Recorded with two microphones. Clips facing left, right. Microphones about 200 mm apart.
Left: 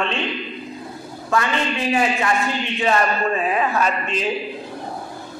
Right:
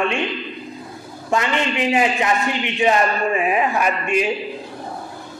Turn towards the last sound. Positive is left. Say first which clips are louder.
# right 2 dB
turn(degrees=-15)  # may be behind; listen again after turning